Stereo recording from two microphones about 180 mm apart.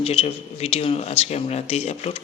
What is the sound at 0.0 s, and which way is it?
Speech, 35° left (ahead or behind).